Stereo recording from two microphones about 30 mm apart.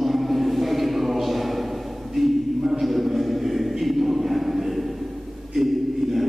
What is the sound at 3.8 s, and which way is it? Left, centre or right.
Choir, centre.